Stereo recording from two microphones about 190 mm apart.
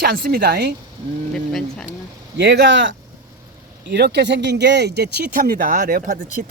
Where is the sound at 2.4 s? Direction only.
65° right (ahead or behind).